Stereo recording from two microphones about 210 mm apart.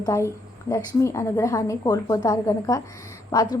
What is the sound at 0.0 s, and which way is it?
A woman's voice, 15° left (ahead or behind).